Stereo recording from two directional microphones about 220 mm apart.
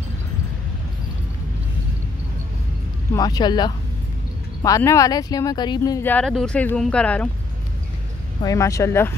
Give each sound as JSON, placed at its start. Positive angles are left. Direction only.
{"t": 3.2, "sound": "speech", "side_deg": 15}
{"t": 8.4, "sound": "speech", "side_deg": 15}